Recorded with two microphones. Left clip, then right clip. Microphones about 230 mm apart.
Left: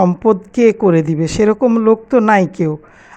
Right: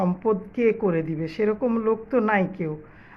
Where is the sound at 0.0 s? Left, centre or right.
Left.